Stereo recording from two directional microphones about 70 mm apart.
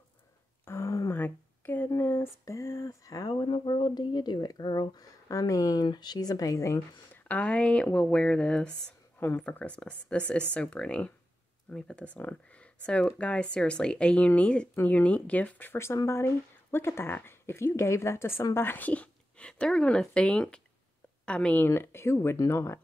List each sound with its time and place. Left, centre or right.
0.7 s a sound: left
1.1 s a sound: left
2.4 s speech: left
3.3 s speech: left
5.3 s speech: left
7.2 s speech: centre
18.9 s speech: centre
21.5 s speech: left